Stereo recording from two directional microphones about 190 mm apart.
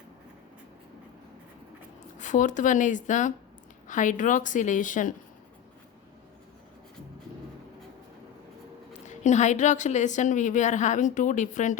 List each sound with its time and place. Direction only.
2.1 s a woman's voice: 40° left (ahead or behind)
8.9 s a woman's voice: 40° left (ahead or behind)